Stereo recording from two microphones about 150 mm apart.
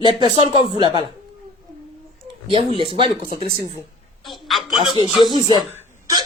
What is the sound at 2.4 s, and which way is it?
Speech, 35° right (ahead or behind).